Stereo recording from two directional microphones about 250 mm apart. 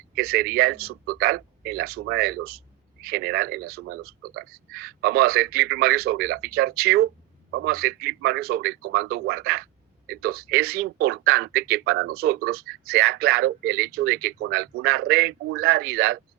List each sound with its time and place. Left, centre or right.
0.2 s speech: right
0.9 s speech: right
1.2 s speech: right
3.8 s speech: right
4.9 s speech: right